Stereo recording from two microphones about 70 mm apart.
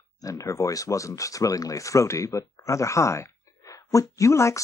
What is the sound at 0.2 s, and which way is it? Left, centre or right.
Speech, left.